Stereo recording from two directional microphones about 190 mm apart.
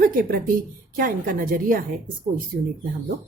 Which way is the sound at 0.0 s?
45° right (ahead or behind).